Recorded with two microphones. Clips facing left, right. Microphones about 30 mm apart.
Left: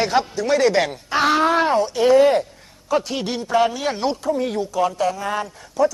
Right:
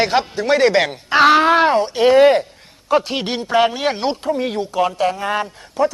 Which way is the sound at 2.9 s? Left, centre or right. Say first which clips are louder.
Right 4 dB; right.